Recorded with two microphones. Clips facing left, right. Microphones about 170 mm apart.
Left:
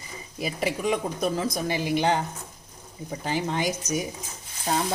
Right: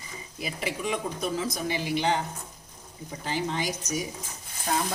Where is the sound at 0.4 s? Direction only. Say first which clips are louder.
Left 5 dB; 45° left (ahead or behind).